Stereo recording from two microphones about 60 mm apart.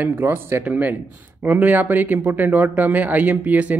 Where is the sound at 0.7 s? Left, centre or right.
Right.